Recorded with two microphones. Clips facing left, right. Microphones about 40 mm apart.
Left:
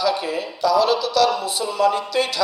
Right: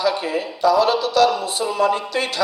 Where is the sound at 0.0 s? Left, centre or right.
Right.